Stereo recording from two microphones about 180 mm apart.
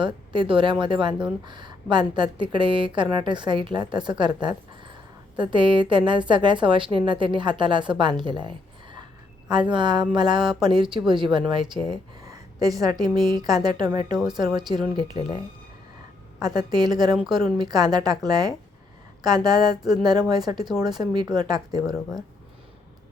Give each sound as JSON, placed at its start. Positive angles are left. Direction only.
{"t": 0.0, "sound": "speech", "side_deg": -25}
{"t": 16.4, "sound": "speech", "side_deg": -20}